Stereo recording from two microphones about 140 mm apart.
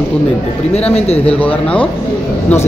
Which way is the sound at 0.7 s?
50° left (ahead or behind).